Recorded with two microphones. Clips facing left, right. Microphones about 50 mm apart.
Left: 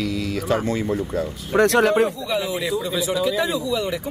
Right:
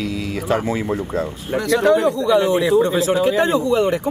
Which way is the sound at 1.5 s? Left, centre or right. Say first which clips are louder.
Left 3 dB; left.